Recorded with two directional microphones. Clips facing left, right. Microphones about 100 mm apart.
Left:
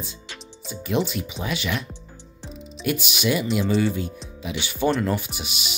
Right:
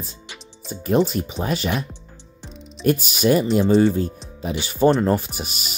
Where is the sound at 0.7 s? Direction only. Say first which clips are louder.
Right 5 dB; 40° right (ahead or behind).